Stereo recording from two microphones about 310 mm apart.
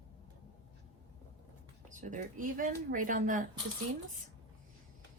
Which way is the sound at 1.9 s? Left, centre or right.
Right.